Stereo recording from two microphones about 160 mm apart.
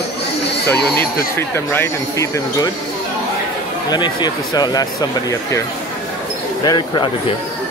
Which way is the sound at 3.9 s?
25° left (ahead or behind).